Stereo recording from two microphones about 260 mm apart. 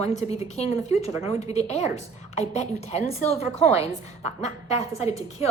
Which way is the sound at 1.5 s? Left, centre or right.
Left.